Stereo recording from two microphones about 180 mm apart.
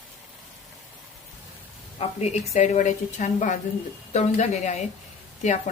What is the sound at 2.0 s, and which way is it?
Speech, 35° left (ahead or behind).